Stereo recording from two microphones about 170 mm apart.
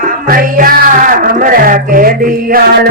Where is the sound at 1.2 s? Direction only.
55° right (ahead or behind).